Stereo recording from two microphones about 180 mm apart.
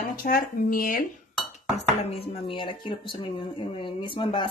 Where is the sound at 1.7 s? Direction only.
35° left (ahead or behind).